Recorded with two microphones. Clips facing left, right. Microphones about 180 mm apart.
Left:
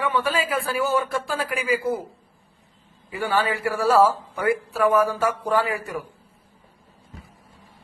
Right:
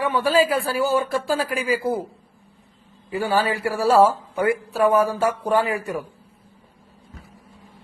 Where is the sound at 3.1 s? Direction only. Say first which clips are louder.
Right 2 dB; 35° right (ahead or behind).